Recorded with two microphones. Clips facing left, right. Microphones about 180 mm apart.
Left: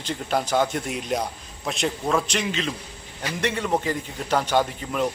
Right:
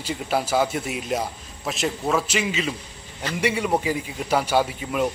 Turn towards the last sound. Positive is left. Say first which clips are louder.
# right 1 dB
turn(degrees=-5)  # may be behind; listen again after turning